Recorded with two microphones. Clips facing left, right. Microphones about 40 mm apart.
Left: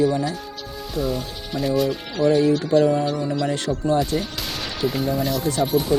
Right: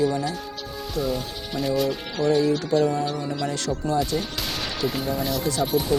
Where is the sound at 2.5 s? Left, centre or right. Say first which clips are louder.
Left 4 dB; centre.